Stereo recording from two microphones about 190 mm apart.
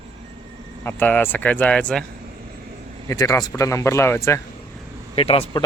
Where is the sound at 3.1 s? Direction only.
15° left (ahead or behind).